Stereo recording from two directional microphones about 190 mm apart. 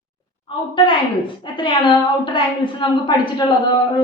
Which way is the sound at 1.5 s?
25° left (ahead or behind).